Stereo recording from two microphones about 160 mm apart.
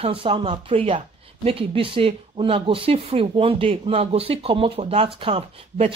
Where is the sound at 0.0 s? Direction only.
35° right (ahead or behind).